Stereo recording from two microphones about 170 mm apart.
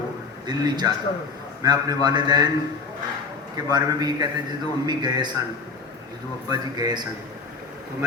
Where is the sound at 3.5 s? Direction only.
25° right (ahead or behind).